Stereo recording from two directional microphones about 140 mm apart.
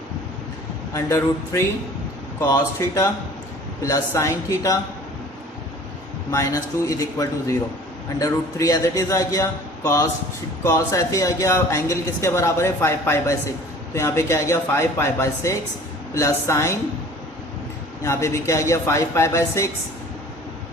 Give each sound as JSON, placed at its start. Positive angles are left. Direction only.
{"t": 0.9, "sound": "speech", "side_deg": 20}
{"t": 6.3, "sound": "speech", "side_deg": 25}
{"t": 18.0, "sound": "speech", "side_deg": 20}